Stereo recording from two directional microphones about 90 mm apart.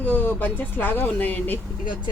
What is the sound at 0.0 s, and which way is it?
Speech, 20° left (ahead or behind).